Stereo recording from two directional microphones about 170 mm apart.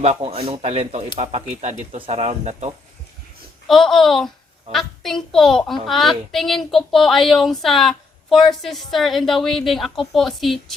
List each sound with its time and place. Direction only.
0.0 s speech: 35° right (ahead or behind)
3.7 s a child's voice: centre (ahead or behind)